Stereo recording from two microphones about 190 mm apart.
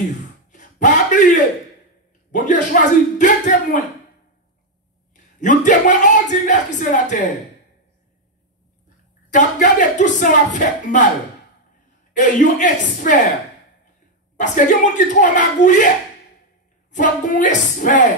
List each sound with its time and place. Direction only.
0.5 s a sound: 40° left (ahead or behind)
2.3 s speech: 40° left (ahead or behind)
5.4 s speech: 40° left (ahead or behind)
9.3 s speech: 40° left (ahead or behind)
12.1 s speech: 40° left (ahead or behind)
14.3 s speech: 40° left (ahead or behind)
16.9 s speech: 40° left (ahead or behind)